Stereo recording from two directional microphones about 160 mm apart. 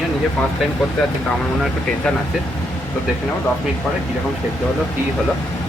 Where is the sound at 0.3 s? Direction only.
5° left (ahead or behind).